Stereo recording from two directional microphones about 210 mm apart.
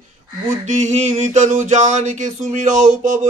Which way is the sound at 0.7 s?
35° right (ahead or behind).